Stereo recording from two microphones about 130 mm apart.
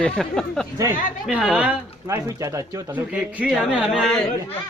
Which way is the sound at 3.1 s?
5° right (ahead or behind).